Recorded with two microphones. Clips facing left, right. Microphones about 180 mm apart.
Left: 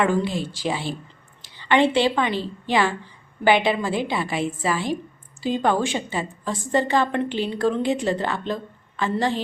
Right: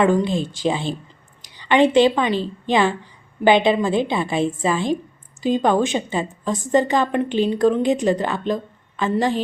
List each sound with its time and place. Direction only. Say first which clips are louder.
0.0 s a woman's voice: right 4 dB; 20° right (ahead or behind)